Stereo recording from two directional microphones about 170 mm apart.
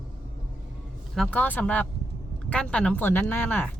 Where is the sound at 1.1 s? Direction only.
5° left (ahead or behind).